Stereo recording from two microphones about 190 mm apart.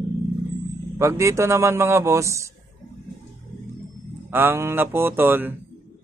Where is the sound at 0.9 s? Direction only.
15° right (ahead or behind).